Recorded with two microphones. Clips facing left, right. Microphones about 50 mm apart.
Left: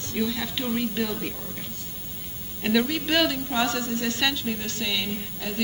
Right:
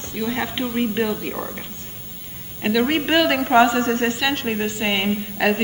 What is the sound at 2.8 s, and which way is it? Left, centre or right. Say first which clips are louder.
A woman's voice: right 6 dB; right.